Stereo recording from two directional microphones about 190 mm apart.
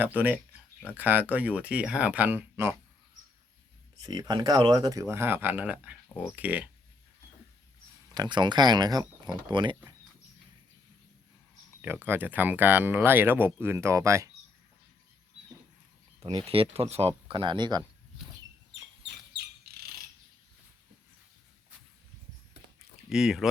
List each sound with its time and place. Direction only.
0.0 s speech: 10° right (ahead or behind)
4.0 s speech: 20° right (ahead or behind)
8.1 s speech: 20° right (ahead or behind)
11.8 s speech: 10° right (ahead or behind)
16.5 s speech: 30° right (ahead or behind)
19.0 s bird: 60° right (ahead or behind)
23.0 s speech: centre (ahead or behind)